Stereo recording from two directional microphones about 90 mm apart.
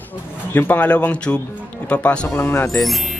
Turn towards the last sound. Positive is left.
turn(degrees=0)  # may be behind; listen again after turning